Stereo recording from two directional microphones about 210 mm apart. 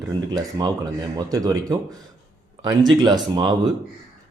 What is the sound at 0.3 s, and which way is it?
Speech, 20° right (ahead or behind).